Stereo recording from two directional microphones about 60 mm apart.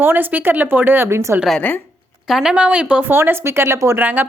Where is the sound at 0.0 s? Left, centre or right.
Right.